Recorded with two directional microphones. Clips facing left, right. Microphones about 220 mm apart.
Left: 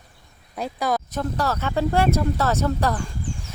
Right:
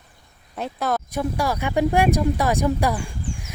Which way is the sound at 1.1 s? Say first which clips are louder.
Right 1 dB; 10° right (ahead or behind).